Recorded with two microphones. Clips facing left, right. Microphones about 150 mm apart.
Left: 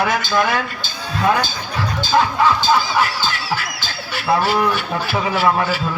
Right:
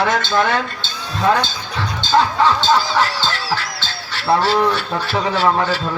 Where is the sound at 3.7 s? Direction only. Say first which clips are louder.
Left 1 dB; 10° left (ahead or behind).